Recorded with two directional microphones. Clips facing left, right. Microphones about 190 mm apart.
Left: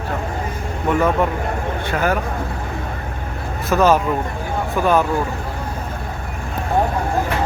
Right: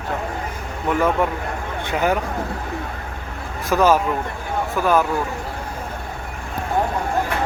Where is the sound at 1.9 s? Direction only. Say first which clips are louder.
Even; 15° right (ahead or behind).